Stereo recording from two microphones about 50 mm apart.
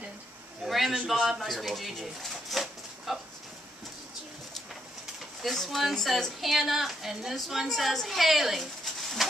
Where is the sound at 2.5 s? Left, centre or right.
Centre.